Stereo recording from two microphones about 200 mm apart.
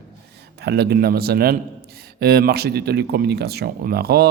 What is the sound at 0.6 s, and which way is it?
A man's voice, 55° right (ahead or behind).